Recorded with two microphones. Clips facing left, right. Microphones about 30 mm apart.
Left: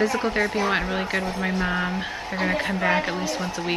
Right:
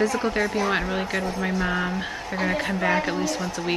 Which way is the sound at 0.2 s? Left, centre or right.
Centre.